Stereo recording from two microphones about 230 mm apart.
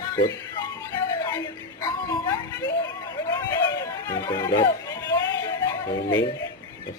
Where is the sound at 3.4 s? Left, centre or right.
Centre.